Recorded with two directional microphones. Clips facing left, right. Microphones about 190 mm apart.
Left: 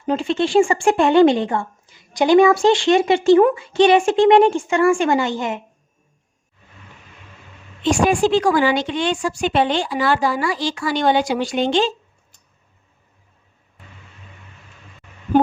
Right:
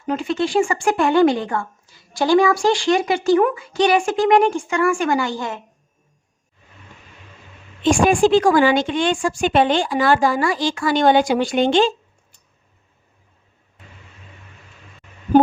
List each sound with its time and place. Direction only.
0.0 s speech: 25° left (ahead or behind)
7.9 s a woman's voice: 50° right (ahead or behind)